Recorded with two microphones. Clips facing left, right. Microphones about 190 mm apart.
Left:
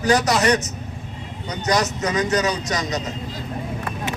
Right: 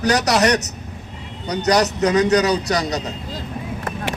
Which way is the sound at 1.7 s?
35° right (ahead or behind).